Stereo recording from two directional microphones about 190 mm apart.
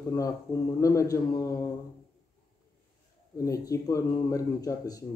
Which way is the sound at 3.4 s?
15° left (ahead or behind).